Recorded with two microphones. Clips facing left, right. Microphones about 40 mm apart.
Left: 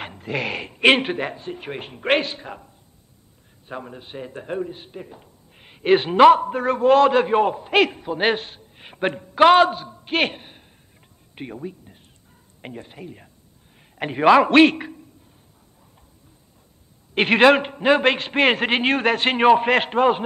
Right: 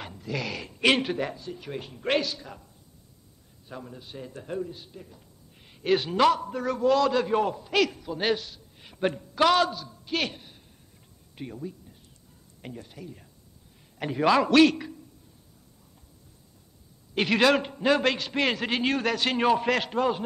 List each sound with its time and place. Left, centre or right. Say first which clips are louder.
0.0 s a man's voice: left 6 dB; left
17.1 s a man's voice: left 7 dB; left